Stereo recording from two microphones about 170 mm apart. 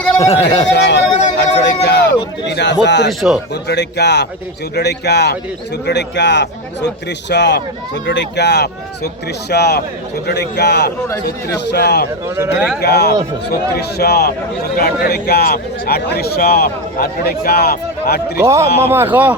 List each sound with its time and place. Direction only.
0.2 s a sound: 35° left (ahead or behind)
0.7 s music: 85° left
2.5 s a sound: 90° left
2.8 s a man's voice: 90° left
3.1 s speech: centre (ahead or behind)
3.5 s a man's voice: 75° left (ahead or behind)
5.8 s a man's voice: 90° left; by 12.0 s 70° left (ahead or behind)
12.4 s speech: 10° right (ahead or behind)
12.8 s a man's voice: 70° left (ahead or behind)
18.3 s speech: 15° right (ahead or behind)